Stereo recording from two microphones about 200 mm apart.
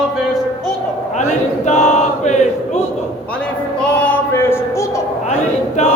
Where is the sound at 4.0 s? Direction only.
10° left (ahead or behind).